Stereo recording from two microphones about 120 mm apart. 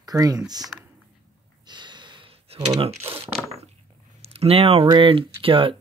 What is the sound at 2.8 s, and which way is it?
Speech, 55° right (ahead or behind).